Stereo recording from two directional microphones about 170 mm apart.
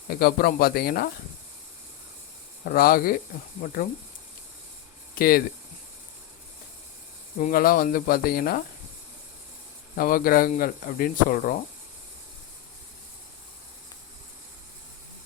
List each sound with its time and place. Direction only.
0.1 s speech: 60° left (ahead or behind)
2.6 s speech: 60° left (ahead or behind)
5.1 s speech: 60° left (ahead or behind)
7.3 s speech: 55° left (ahead or behind)
10.0 s speech: 55° left (ahead or behind)